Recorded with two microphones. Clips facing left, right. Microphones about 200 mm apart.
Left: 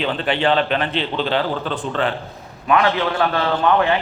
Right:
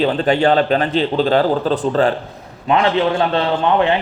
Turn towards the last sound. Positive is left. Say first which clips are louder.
# right 2 dB
turn(degrees=-25)  # may be behind; listen again after turning